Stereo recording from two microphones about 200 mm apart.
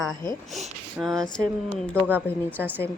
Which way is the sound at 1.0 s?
10° right (ahead or behind).